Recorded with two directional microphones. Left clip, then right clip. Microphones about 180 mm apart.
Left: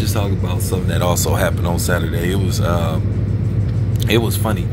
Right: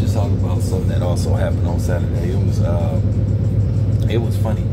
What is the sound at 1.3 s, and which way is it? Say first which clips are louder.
Speech: left 4 dB; 20° left (ahead or behind).